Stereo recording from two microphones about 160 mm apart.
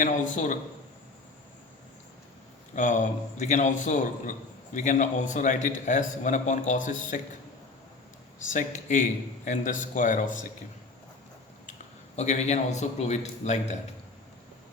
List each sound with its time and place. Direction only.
0.0 s a man's voice: 50° left (ahead or behind)
2.7 s a man's voice: 50° left (ahead or behind)
8.5 s a man's voice: 50° left (ahead or behind)
12.1 s a man's voice: 45° left (ahead or behind)